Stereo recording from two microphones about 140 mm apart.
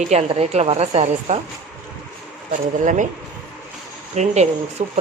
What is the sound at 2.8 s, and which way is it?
Speech, 65° right (ahead or behind).